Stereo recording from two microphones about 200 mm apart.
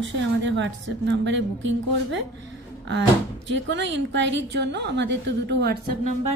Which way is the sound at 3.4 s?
60° right (ahead or behind).